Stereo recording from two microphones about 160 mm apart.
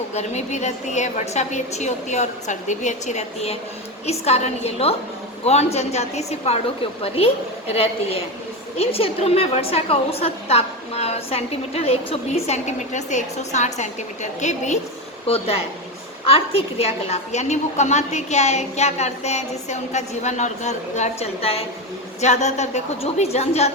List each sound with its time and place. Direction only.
0.1 s a woman's voice: 45° left (ahead or behind)
7.7 s a woman's voice: 40° left (ahead or behind)